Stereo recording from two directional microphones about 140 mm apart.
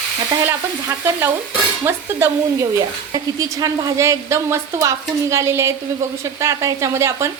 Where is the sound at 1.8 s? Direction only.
20° right (ahead or behind).